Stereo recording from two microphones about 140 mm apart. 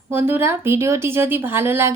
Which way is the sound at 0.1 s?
15° right (ahead or behind).